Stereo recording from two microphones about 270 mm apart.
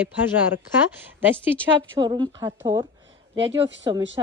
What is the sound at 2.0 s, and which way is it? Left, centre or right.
A woman's voice, centre.